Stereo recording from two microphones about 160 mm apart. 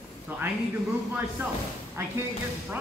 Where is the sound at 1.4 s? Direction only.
15° right (ahead or behind).